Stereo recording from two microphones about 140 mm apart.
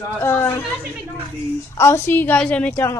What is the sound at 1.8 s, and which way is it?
A woman's voice, 15° left (ahead or behind).